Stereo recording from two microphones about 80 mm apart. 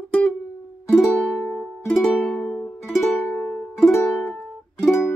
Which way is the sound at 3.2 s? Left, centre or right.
Left.